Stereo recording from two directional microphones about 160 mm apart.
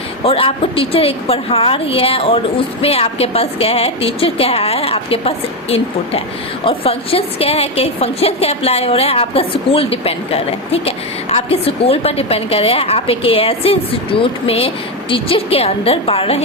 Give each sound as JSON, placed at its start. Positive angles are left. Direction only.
{"t": 0.3, "sound": "a woman's voice", "side_deg": 35}